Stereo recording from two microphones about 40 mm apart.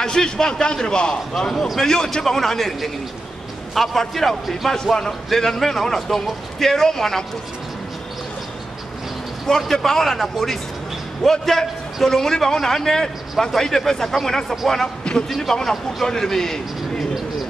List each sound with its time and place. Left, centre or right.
0.0 s a man's voice: centre
9.5 s a man's voice: centre